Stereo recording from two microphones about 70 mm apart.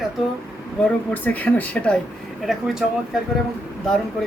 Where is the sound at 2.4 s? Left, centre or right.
Centre.